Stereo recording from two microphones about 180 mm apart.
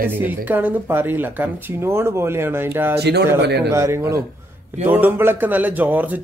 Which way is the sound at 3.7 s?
15° right (ahead or behind).